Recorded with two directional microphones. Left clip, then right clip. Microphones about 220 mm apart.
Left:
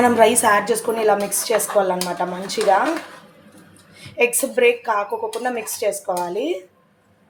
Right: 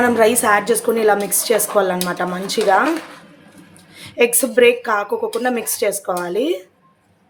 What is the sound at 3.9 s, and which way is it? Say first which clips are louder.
Speech: right 3 dB; 25° right (ahead or behind).